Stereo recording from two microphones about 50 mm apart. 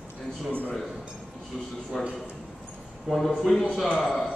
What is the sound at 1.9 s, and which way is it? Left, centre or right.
A man's voice, centre.